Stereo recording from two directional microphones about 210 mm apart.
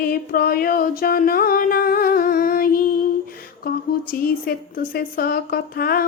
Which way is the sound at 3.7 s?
45° left (ahead or behind).